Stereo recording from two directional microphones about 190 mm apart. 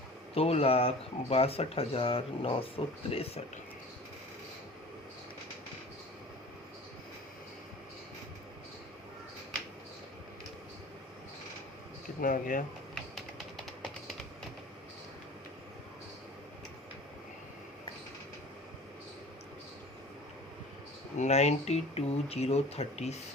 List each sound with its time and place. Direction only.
0.3 s speech: 30° left (ahead or behind)
12.2 s speech: 45° left (ahead or behind)
21.2 s speech: 35° left (ahead or behind)